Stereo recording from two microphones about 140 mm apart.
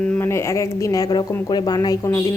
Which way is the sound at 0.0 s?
15° left (ahead or behind).